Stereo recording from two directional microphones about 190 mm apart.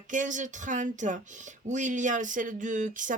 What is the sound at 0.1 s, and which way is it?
Speech, 40° right (ahead or behind).